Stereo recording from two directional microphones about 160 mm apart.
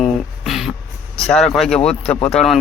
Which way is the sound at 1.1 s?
5° left (ahead or behind).